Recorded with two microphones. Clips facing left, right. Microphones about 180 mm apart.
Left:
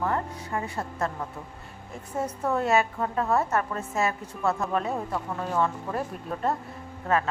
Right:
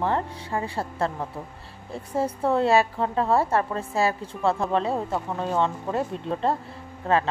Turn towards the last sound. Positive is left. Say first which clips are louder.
# right 3 dB
turn(degrees=-30)  # may be behind; listen again after turning